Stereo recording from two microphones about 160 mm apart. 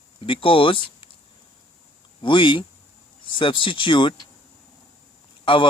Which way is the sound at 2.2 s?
30° left (ahead or behind).